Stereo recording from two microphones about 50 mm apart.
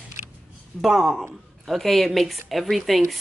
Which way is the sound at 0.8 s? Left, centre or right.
Centre.